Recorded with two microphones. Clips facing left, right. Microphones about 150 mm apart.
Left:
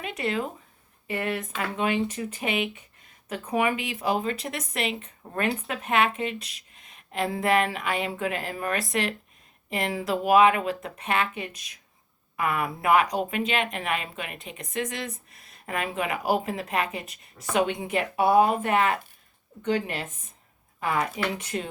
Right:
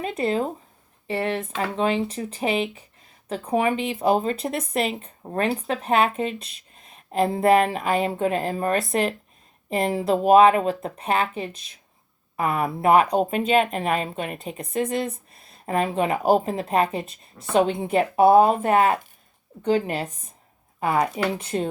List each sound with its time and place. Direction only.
0.0 s speech: 35° right (ahead or behind)